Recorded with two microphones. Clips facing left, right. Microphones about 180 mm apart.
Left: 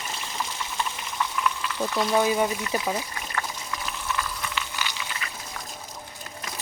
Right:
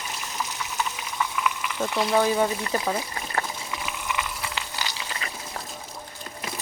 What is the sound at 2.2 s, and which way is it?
Speech, 10° left (ahead or behind).